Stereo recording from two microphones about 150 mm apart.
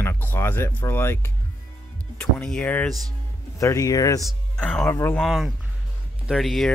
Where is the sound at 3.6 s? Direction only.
20° left (ahead or behind).